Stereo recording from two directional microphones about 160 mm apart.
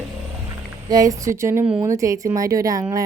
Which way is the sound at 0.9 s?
20° right (ahead or behind).